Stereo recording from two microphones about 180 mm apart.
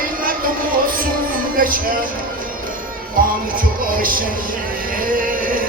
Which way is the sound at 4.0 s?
50° right (ahead or behind).